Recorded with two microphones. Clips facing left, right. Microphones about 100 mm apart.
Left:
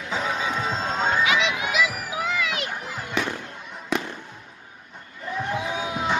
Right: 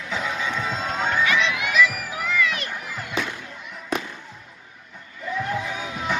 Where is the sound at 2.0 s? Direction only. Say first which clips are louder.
Right 2 dB; 15° left (ahead or behind).